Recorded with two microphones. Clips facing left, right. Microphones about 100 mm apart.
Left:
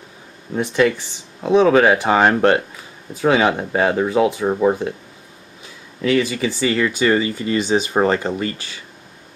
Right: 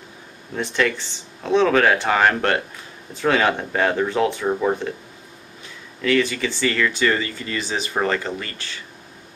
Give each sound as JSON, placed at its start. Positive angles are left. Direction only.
{"t": 0.6, "sound": "speech", "side_deg": 15}
{"t": 5.9, "sound": "speech", "side_deg": 15}